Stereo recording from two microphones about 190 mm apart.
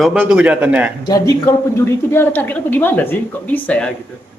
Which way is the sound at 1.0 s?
20° left (ahead or behind).